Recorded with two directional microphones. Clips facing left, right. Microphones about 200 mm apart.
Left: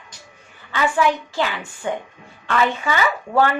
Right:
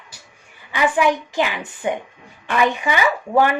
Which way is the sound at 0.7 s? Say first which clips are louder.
Right 1 dB; 15° right (ahead or behind).